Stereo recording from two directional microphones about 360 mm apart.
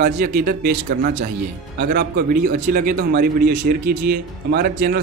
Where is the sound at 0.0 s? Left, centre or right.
Right.